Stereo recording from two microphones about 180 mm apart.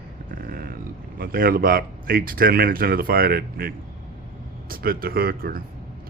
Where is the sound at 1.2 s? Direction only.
55° right (ahead or behind).